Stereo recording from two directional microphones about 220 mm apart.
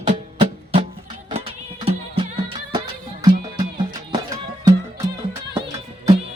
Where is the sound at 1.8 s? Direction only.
25° right (ahead or behind).